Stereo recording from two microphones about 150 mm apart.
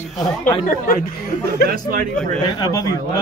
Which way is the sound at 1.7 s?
70° right (ahead or behind).